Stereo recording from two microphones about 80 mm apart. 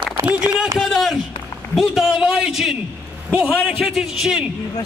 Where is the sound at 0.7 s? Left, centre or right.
Centre.